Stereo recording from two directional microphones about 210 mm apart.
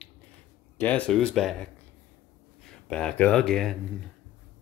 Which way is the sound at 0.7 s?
5° left (ahead or behind).